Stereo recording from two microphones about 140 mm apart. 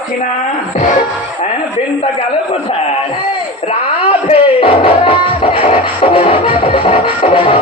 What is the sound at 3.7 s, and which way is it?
Speech, 45° left (ahead or behind).